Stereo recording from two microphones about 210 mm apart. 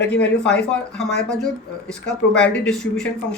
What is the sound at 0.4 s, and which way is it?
Speech, 5° left (ahead or behind).